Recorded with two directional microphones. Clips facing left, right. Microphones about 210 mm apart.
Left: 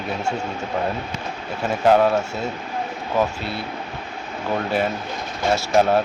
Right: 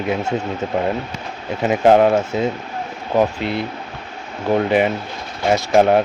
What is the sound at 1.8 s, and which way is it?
Speech, 20° right (ahead or behind).